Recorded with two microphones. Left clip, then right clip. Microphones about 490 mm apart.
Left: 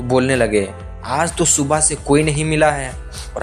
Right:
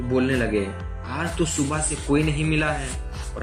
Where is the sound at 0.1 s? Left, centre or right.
Left.